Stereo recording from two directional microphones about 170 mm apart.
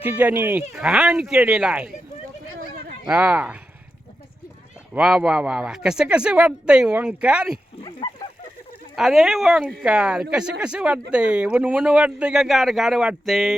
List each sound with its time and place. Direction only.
0.0 s speech: 10° right (ahead or behind)
3.1 s speech: 5° right (ahead or behind)
4.9 s speech: 5° right (ahead or behind)
7.5 s a sound: 30° left (ahead or behind)
9.0 s speech: centre (ahead or behind)